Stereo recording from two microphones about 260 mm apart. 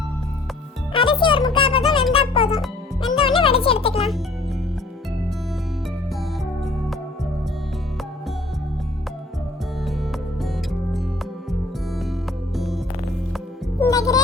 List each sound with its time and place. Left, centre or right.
0.9 s music: centre
12.5 s music: centre
13.7 s music: centre